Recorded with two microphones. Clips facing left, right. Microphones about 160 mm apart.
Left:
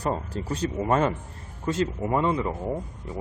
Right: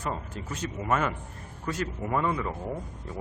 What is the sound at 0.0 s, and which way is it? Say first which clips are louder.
Speech: left 6 dB; 35° left (ahead or behind).